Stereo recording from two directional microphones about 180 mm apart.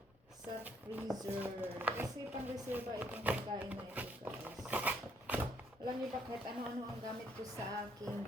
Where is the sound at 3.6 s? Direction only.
10° right (ahead or behind).